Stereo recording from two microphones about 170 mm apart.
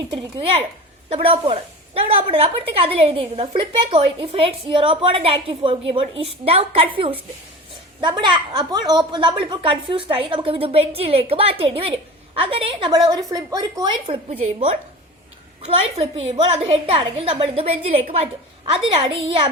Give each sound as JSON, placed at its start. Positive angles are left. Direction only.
{"t": 0.1, "sound": "a woman's voice", "side_deg": -30}
{"t": 15.6, "sound": "a woman's voice", "side_deg": -35}